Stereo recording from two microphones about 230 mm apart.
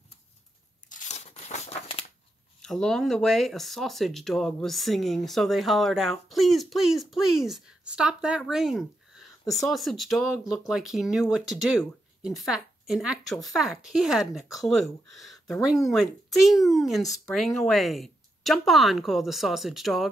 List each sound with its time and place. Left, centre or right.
0.8 s tearing: left
2.6 s speech: centre